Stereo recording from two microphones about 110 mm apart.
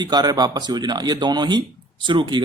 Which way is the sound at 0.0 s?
40° right (ahead or behind).